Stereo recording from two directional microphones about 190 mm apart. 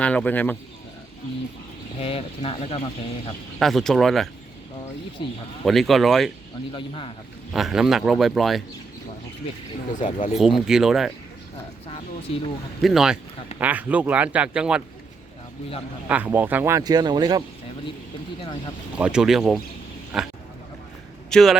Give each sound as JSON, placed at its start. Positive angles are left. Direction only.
{"t": 0.0, "sound": "speech", "side_deg": 5}
{"t": 2.0, "sound": "speech", "side_deg": 30}
{"t": 3.6, "sound": "a man's voice", "side_deg": 0}
{"t": 5.2, "sound": "speech", "side_deg": 25}
{"t": 5.6, "sound": "a man's voice", "side_deg": 0}
{"t": 6.7, "sound": "speech", "side_deg": 30}
{"t": 7.5, "sound": "a man's voice", "side_deg": 0}
{"t": 10.0, "sound": "speech", "side_deg": 40}
{"t": 10.3, "sound": "a man's voice", "side_deg": 0}
{"t": 12.8, "sound": "a man's voice", "side_deg": 0}
{"t": 16.0, "sound": "speech", "side_deg": -10}
{"t": 18.9, "sound": "a man's voice", "side_deg": -5}